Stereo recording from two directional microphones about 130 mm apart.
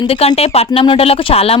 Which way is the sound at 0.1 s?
50° left (ahead or behind).